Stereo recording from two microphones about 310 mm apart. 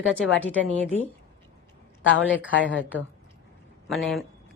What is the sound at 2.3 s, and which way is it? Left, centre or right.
Speech, left.